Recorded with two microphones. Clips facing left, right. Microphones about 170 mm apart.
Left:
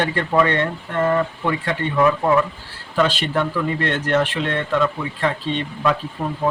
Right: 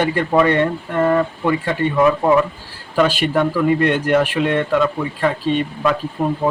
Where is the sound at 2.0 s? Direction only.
20° right (ahead or behind).